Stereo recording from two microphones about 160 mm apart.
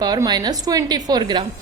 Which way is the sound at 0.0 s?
25° right (ahead or behind).